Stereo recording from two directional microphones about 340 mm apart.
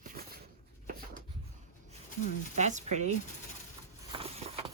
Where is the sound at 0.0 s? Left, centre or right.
Right.